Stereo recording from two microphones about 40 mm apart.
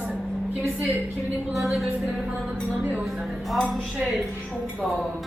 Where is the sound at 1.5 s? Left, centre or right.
Centre.